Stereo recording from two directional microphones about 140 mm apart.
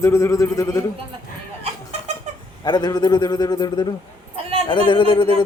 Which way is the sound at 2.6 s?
30° left (ahead or behind).